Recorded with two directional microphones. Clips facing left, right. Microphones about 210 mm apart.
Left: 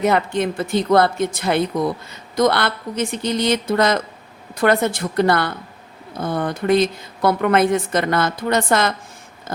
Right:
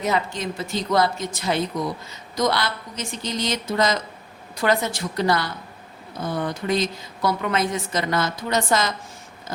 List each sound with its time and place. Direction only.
0.0 s speech: 60° left (ahead or behind)